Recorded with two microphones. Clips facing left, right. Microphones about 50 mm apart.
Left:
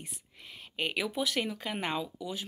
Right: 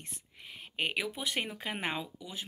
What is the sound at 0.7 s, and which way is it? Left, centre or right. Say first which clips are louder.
Speech: left 2 dB; centre.